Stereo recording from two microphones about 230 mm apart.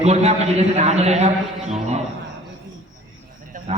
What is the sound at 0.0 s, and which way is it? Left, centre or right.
A man's voice, right.